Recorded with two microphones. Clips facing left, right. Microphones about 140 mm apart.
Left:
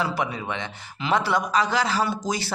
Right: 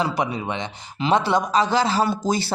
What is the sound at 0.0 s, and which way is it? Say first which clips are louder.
Speech: right 3 dB; 20° right (ahead or behind).